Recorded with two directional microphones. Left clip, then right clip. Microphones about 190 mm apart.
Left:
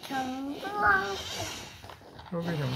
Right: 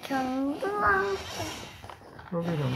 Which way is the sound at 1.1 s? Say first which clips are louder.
Right 2 dB; 10° left (ahead or behind).